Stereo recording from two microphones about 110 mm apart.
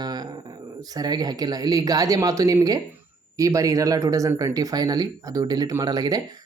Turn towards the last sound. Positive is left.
turn(degrees=-35)  # may be behind; listen again after turning